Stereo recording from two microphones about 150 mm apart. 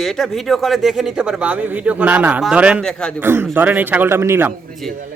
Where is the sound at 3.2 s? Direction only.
15° right (ahead or behind).